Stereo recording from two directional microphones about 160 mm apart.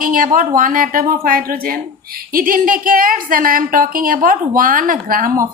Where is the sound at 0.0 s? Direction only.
60° right (ahead or behind).